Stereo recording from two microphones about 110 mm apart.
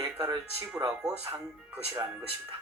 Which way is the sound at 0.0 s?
35° right (ahead or behind).